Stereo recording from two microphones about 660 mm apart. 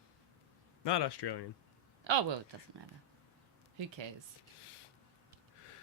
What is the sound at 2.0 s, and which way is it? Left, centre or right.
Speech, right.